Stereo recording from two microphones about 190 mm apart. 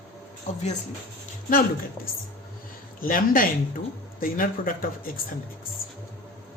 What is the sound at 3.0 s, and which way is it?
A man's voice, 45° left (ahead or behind).